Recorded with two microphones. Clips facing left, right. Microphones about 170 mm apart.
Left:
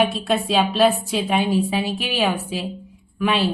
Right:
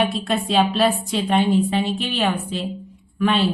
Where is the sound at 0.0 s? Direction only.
Centre (ahead or behind).